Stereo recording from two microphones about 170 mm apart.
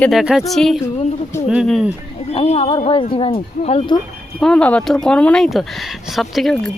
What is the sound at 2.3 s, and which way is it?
Speech, 35° left (ahead or behind).